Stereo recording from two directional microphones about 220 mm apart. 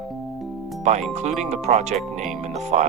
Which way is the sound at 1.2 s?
30° right (ahead or behind).